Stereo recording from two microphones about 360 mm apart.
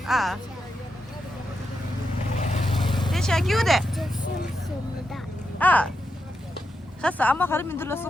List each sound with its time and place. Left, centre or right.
0.0 s speech: centre
2.4 s vehicle: centre
3.1 s speech: centre
5.1 s vehicle: centre
7.0 s speech: centre